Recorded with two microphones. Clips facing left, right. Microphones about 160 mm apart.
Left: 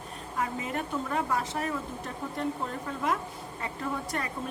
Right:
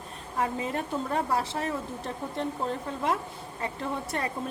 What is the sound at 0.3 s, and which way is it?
A woman's voice, 30° right (ahead or behind).